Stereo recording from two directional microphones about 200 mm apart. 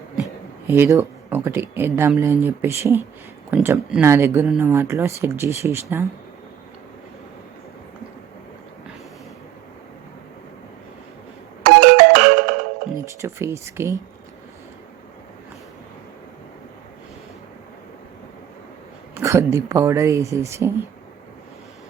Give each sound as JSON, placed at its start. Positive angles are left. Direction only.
{"t": 0.7, "sound": "speech", "side_deg": -15}
{"t": 11.6, "sound": "ringtone", "side_deg": -60}
{"t": 13.2, "sound": "speech", "side_deg": -15}
{"t": 19.1, "sound": "speech", "side_deg": -15}